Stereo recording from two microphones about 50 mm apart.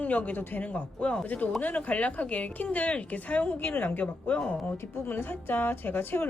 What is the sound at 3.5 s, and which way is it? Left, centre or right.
Speech, left.